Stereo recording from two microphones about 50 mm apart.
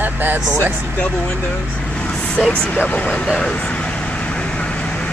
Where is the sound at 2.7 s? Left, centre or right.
Left.